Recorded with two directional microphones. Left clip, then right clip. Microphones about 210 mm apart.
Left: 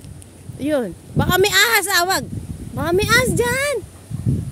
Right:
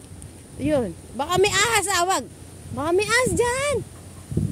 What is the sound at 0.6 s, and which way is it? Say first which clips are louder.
Speech: left 2 dB; 20° left (ahead or behind).